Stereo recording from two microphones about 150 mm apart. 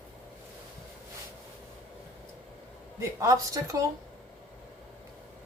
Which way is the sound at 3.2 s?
20° right (ahead or behind).